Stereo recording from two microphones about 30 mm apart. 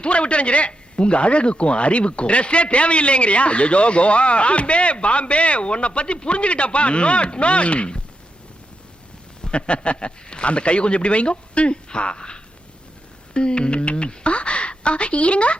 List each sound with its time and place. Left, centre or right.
0.0 s speech: left
9.4 s a woman's voice: left